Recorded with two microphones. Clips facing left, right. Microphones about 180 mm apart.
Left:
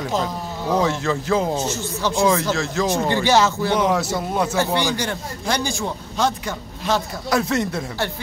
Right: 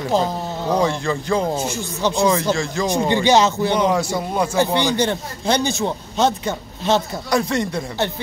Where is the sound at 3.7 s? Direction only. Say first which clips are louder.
Right 1 dB; centre (ahead or behind).